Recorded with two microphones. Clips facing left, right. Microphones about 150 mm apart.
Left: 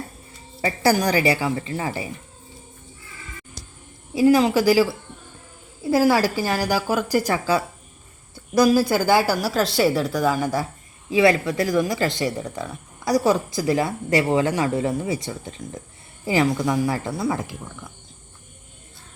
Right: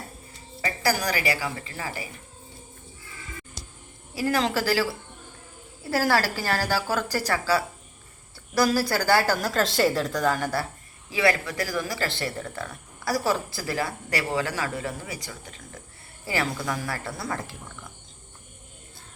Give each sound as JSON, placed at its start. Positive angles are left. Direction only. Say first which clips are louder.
{"t": 0.6, "sound": "speech", "louder": "left 6 dB", "side_deg": 25}
{"t": 4.1, "sound": "a woman's voice", "louder": "left 9 dB", "side_deg": 15}